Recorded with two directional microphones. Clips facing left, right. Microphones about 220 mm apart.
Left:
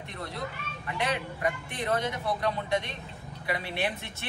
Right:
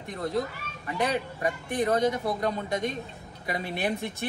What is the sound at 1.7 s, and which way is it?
Speech, 45° right (ahead or behind).